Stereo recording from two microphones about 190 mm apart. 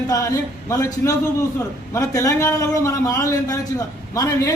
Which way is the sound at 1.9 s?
15° left (ahead or behind).